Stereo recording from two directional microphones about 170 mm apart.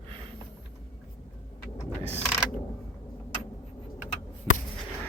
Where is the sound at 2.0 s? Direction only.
35° right (ahead or behind).